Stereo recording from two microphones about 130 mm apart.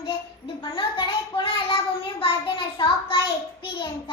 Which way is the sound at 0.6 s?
35° left (ahead or behind).